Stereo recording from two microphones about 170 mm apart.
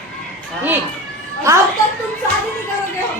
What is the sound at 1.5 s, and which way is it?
Speech, 15° right (ahead or behind).